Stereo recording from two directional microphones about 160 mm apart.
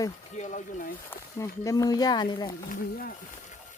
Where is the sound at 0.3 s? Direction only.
50° left (ahead or behind).